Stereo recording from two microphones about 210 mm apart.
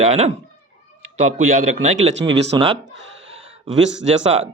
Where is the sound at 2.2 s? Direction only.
30° right (ahead or behind).